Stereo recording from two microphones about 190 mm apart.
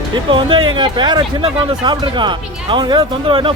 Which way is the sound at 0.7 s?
25° right (ahead or behind).